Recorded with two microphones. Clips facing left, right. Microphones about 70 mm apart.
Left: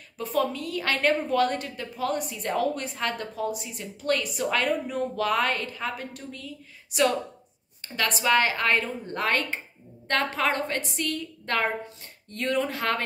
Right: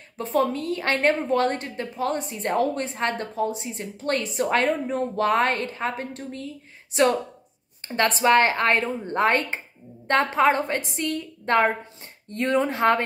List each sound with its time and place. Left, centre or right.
0.2 s a woman's voice: right